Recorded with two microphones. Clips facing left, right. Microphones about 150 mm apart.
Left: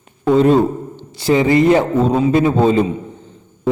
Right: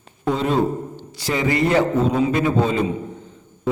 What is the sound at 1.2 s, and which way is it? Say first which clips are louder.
A man's voice: left 8 dB; 25° left (ahead or behind).